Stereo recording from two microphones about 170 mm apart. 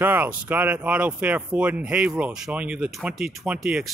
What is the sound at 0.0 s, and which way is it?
Speech, 10° right (ahead or behind).